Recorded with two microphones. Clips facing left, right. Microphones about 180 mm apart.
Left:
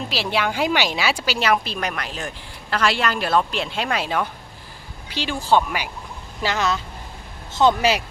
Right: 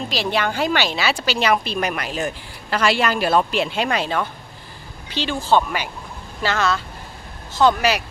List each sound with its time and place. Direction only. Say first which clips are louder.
0.1 s a woman's voice: right 1 dB; 5° left (ahead or behind); by 8.0 s 25° left (ahead or behind)